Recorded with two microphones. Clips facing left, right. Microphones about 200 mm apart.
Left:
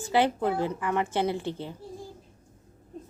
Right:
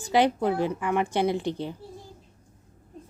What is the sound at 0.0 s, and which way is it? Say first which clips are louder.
Speech: right 2 dB; 15° right (ahead or behind).